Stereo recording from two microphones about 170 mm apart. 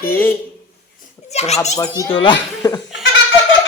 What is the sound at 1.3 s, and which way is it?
Children playing, 40° left (ahead or behind).